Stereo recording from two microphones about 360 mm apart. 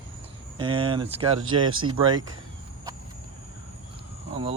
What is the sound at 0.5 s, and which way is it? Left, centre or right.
Speech, centre.